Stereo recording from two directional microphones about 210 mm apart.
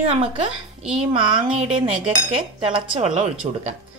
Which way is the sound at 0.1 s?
25° right (ahead or behind).